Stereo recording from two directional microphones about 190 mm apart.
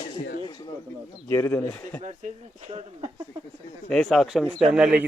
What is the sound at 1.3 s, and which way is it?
Speech, 15° left (ahead or behind).